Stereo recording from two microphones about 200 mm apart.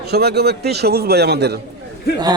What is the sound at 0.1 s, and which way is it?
A man's voice, 55° right (ahead or behind).